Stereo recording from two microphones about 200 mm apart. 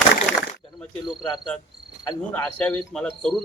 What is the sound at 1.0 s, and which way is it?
Speech, 20° left (ahead or behind).